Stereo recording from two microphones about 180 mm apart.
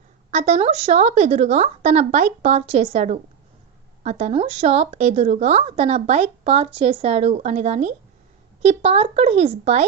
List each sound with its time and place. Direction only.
0.3 s a woman's voice: 40° right (ahead or behind)